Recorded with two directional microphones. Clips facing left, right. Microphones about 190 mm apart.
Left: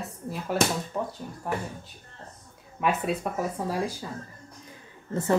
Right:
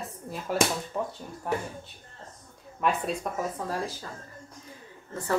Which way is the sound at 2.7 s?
5° left (ahead or behind).